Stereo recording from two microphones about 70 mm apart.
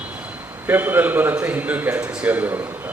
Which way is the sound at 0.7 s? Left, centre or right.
Right.